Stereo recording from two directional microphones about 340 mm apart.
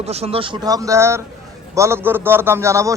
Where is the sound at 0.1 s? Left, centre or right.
Centre.